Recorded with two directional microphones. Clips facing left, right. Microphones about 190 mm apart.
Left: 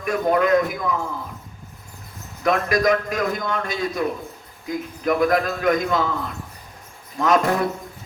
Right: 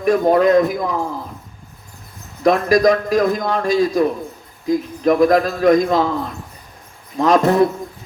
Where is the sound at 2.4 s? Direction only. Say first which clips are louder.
Right 6 dB; 35° right (ahead or behind).